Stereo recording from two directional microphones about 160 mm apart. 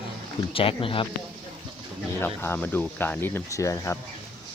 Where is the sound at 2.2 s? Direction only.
15° left (ahead or behind).